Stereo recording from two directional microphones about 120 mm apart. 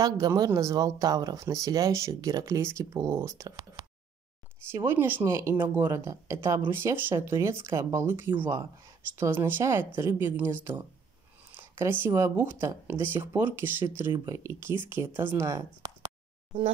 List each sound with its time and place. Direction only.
0.0 s speech: 30° right (ahead or behind)